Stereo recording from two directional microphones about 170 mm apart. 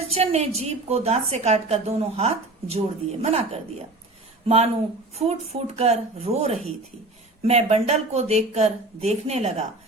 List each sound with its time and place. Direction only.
0.1 s a woman's voice: 40° right (ahead or behind)